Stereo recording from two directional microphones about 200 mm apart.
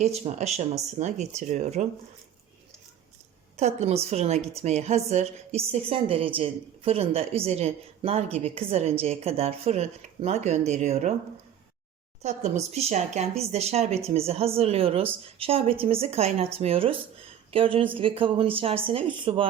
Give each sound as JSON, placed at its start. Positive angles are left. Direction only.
{"t": 0.0, "sound": "a woman's voice", "side_deg": -35}
{"t": 3.6, "sound": "a woman's voice", "side_deg": -30}
{"t": 12.2, "sound": "a woman's voice", "side_deg": -35}